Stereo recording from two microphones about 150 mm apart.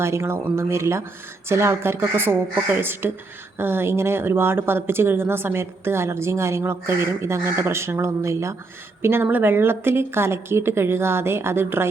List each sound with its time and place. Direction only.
0.0 s speech: 15° right (ahead or behind)